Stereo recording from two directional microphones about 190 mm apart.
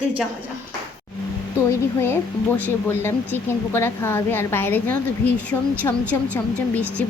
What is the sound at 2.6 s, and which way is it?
A woman's voice, 10° left (ahead or behind).